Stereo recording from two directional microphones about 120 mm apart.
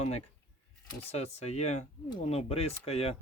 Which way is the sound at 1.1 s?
60° left (ahead or behind).